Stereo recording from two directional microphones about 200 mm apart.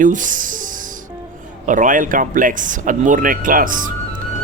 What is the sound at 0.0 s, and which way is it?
Speech, 40° right (ahead or behind).